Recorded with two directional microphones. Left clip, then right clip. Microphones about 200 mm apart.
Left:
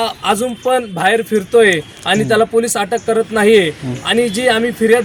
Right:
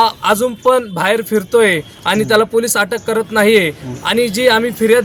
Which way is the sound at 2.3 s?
25° right (ahead or behind).